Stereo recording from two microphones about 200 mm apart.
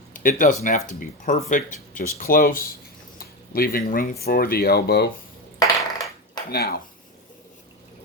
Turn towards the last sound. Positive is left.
turn(degrees=50)  # may be behind; listen again after turning